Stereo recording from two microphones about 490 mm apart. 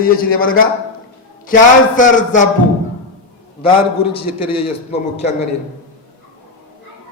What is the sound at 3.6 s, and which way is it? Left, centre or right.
Speech, centre.